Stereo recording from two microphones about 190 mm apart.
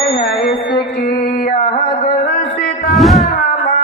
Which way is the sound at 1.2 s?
45° left (ahead or behind).